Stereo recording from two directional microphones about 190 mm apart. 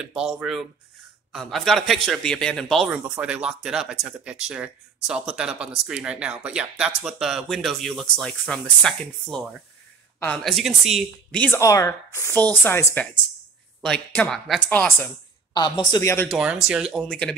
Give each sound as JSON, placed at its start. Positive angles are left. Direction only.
{"t": 0.0, "sound": "a man's voice", "side_deg": -5}
{"t": 15.5, "sound": "speech", "side_deg": 25}
{"t": 16.3, "sound": "a man's voice", "side_deg": -5}